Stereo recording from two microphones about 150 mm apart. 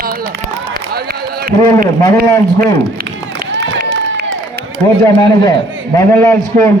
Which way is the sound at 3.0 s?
85° right.